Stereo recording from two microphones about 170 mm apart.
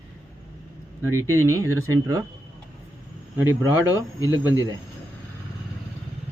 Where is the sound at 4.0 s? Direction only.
20° left (ahead or behind).